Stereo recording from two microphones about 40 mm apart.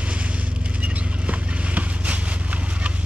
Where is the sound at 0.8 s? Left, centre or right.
Right.